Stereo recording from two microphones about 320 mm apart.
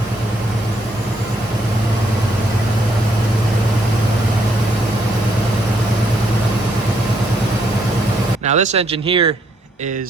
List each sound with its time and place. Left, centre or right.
8.4 s speech: right